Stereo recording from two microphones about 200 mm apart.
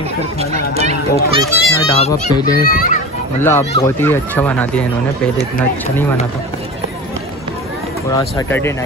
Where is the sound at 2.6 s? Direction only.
45° left (ahead or behind).